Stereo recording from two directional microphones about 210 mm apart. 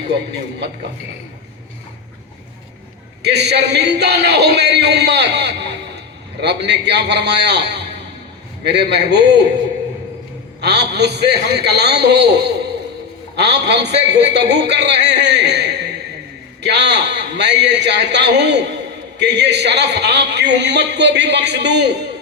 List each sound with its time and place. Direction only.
3.2 s a man's voice: 50° right (ahead or behind)
10.6 s a man's voice: 50° right (ahead or behind)